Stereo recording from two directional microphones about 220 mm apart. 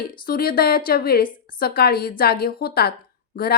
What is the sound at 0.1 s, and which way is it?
A woman's voice, 40° left (ahead or behind).